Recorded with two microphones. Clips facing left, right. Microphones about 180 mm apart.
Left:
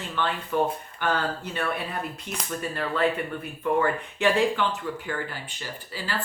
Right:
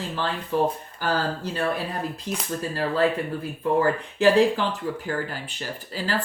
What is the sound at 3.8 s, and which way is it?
Speech, 35° right (ahead or behind).